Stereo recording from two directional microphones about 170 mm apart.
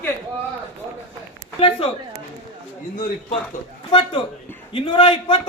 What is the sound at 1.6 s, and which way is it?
Speech, 35° left (ahead or behind).